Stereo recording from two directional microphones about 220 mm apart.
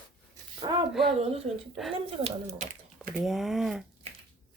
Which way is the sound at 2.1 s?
25° right (ahead or behind).